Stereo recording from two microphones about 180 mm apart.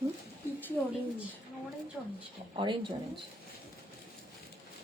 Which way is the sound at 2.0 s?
Centre (ahead or behind).